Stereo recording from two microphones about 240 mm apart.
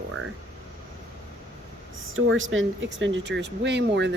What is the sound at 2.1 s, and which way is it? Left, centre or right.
Speech, right.